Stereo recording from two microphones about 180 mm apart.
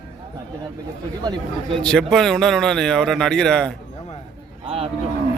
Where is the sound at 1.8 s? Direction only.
5° left (ahead or behind).